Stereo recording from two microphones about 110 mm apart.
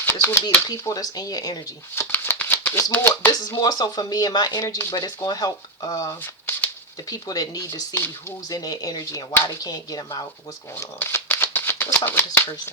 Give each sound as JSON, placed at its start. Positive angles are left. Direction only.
{"t": 0.0, "sound": "speech", "side_deg": 20}
{"t": 0.7, "sound": "speech", "side_deg": 35}
{"t": 2.0, "sound": "shuffling cards", "side_deg": 20}
{"t": 3.3, "sound": "speech", "side_deg": 35}
{"t": 6.2, "sound": "shuffling cards", "side_deg": 20}
{"t": 7.1, "sound": "speech", "side_deg": 35}
{"t": 10.8, "sound": "a sound", "side_deg": 20}
{"t": 11.9, "sound": "speech", "side_deg": 20}